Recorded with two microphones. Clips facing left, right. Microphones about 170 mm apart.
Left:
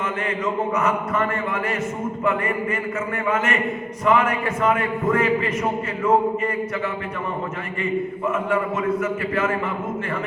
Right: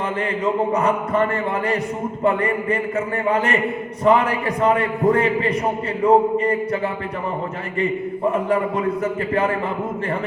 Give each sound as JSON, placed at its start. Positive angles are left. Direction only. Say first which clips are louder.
{"t": 0.4, "sound": "a man's voice", "louder": "right 4 dB", "side_deg": -35}
{"t": 7.8, "sound": "a man's voice", "louder": "right 3 dB", "side_deg": -35}